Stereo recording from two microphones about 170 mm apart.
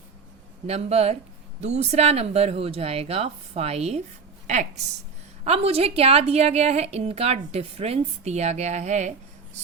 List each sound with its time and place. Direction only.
0.7 s a woman's voice: 35° right (ahead or behind)
5.5 s a woman's voice: 35° right (ahead or behind)